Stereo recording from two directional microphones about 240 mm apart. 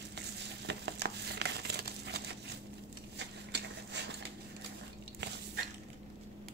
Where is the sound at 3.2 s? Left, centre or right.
Right.